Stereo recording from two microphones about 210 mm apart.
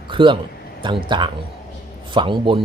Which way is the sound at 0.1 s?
25° right (ahead or behind).